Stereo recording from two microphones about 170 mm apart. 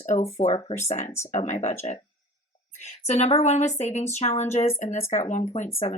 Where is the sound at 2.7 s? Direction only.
40° left (ahead or behind).